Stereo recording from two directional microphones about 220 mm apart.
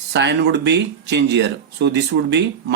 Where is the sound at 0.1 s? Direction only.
50° right (ahead or behind).